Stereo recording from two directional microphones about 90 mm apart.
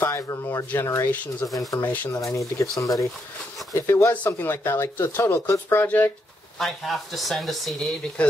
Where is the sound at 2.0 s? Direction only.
35° left (ahead or behind); by 6.1 s 20° left (ahead or behind).